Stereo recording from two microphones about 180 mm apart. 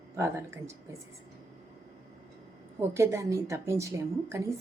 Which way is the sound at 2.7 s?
15° right (ahead or behind).